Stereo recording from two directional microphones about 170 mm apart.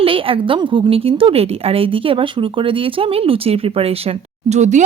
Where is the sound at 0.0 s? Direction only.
30° right (ahead or behind).